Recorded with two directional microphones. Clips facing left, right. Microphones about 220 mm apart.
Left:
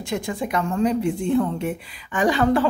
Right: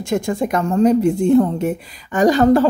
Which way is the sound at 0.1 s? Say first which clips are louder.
Right 6 dB; 45° right (ahead or behind).